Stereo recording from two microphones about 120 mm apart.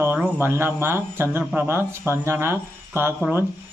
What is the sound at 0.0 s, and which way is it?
Speech, 15° right (ahead or behind).